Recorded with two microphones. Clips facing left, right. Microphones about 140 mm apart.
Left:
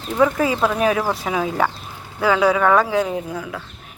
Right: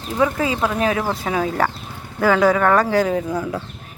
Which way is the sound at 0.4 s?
20° right (ahead or behind).